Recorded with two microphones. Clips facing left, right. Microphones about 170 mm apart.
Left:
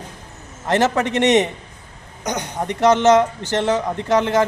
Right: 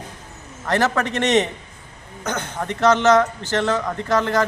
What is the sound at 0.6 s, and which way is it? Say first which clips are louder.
A man's voice: left 2 dB; 20° left (ahead or behind).